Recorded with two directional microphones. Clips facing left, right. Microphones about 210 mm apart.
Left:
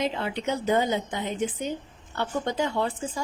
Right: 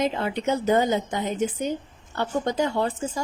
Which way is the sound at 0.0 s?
45° right (ahead or behind).